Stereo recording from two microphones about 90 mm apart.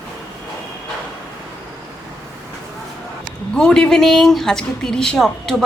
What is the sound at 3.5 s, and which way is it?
A woman's voice, 5° left (ahead or behind).